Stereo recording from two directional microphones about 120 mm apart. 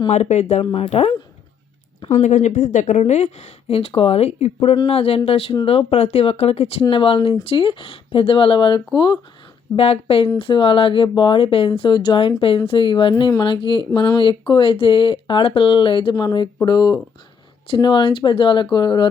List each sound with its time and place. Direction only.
0.1 s speech: 70° left (ahead or behind)
0.6 s speech: 50° left (ahead or behind)
2.2 s speech: 75° left (ahead or behind); by 8.8 s 40° left (ahead or behind)
9.7 s speech: 55° left (ahead or behind); by 19.0 s 40° left (ahead or behind)